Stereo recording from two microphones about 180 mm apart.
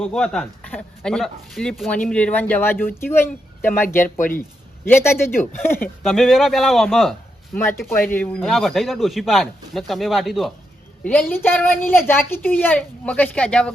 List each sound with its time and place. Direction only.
0.0 s a man's voice: 5° left (ahead or behind)
4.0 s speech: 50° left (ahead or behind)
4.9 s a woman's voice: 15° left (ahead or behind)
6.0 s a man's voice: centre (ahead or behind)
7.6 s a woman's voice: 15° left (ahead or behind)